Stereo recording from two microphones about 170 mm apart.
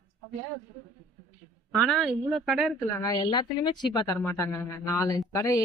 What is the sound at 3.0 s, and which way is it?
Speech, 20° left (ahead or behind).